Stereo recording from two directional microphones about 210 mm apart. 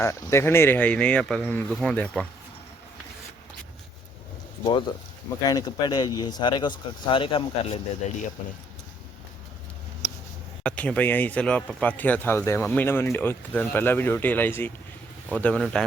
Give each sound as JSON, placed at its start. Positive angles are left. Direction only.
{"t": 0.0, "sound": "speech", "side_deg": 15}
{"t": 5.4, "sound": "speech", "side_deg": 20}
{"t": 10.6, "sound": "speech", "side_deg": 5}